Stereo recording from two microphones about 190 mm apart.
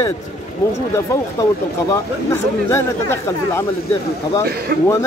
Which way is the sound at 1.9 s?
15° left (ahead or behind).